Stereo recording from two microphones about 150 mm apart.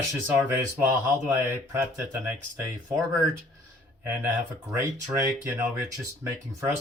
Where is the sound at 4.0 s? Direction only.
15° right (ahead or behind).